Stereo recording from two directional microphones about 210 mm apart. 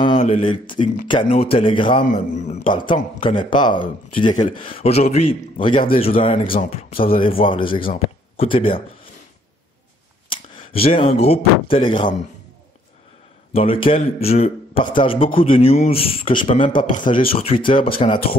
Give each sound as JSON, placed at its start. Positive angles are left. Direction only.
{"t": 0.2, "sound": "a man's voice", "side_deg": 25}
{"t": 2.0, "sound": "a man's voice", "side_deg": 35}
{"t": 10.3, "sound": "a sound", "side_deg": 25}
{"t": 11.7, "sound": "a man's voice", "side_deg": 25}
{"t": 13.6, "sound": "a man's voice", "side_deg": 25}
{"t": 15.0, "sound": "a man's voice", "side_deg": 25}